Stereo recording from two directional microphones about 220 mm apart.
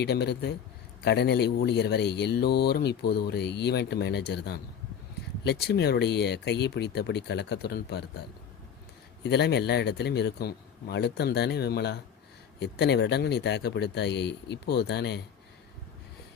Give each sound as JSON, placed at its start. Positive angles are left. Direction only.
{"t": 0.0, "sound": "speech", "side_deg": 50}
{"t": 9.2, "sound": "speech", "side_deg": 50}